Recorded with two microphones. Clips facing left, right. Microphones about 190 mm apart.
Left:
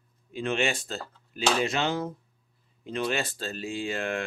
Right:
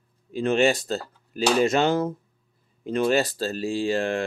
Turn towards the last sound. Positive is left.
turn(degrees=-35)  # may be behind; listen again after turning